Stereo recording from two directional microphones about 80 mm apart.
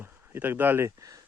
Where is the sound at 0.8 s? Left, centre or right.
Right.